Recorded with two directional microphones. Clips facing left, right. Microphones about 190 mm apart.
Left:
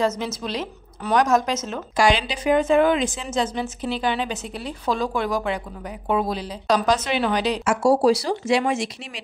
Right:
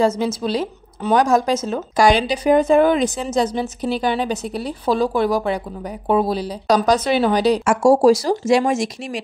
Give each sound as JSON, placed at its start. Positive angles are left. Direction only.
{"t": 0.0, "sound": "speech", "side_deg": -30}